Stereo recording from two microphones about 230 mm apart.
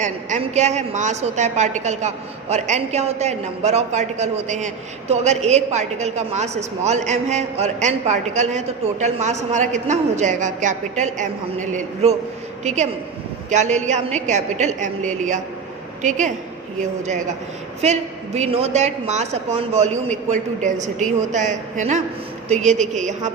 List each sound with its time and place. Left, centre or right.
0.0 s a woman's voice: right
17.8 s a woman's voice: right